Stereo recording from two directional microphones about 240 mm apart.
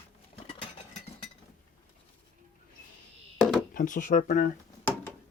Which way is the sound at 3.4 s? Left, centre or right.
Centre.